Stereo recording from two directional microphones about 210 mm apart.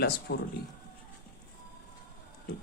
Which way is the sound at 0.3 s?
50° left (ahead or behind).